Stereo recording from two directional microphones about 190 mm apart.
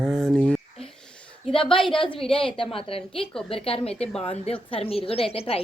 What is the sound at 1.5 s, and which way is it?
Speech, 30° left (ahead or behind).